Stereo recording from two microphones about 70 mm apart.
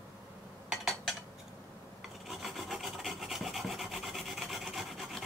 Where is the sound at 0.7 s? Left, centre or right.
Centre.